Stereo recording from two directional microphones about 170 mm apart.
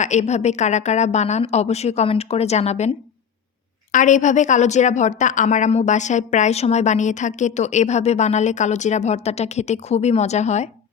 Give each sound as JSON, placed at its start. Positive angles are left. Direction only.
{"t": 0.0, "sound": "a woman's voice", "side_deg": 45}
{"t": 3.9, "sound": "a woman's voice", "side_deg": 45}